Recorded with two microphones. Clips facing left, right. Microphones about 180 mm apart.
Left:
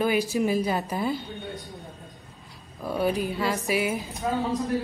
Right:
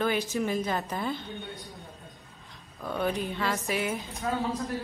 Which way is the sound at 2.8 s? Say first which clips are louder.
Left 4 dB; 10° left (ahead or behind).